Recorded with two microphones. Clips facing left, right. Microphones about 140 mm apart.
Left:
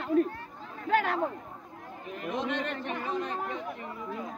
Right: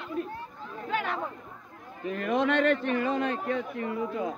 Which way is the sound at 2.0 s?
90° right.